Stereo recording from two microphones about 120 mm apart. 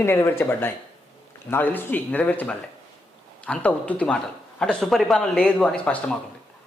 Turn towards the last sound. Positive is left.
turn(degrees=5)  # may be behind; listen again after turning